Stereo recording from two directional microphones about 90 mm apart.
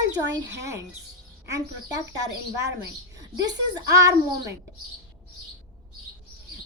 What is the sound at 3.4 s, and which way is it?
Speech, 45° right (ahead or behind).